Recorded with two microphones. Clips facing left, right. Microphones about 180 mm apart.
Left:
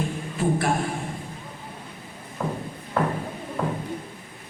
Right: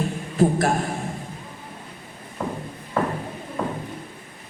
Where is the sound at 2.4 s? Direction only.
Centre (ahead or behind).